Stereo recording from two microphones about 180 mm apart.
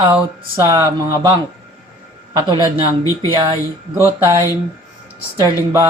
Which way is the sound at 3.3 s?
25° right (ahead or behind).